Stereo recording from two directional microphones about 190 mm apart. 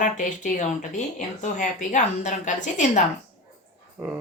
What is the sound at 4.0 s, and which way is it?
Speech, 10° right (ahead or behind).